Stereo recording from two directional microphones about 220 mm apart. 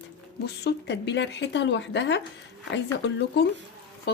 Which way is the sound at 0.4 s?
50° left (ahead or behind).